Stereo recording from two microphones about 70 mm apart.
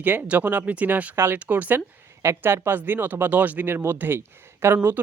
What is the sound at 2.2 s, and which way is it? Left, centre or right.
Speech, right.